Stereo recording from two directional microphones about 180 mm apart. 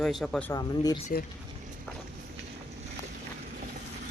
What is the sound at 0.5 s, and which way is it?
Speech, 20° left (ahead or behind).